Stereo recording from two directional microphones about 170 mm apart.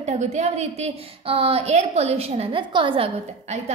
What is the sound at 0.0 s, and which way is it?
A woman's voice, 40° right (ahead or behind).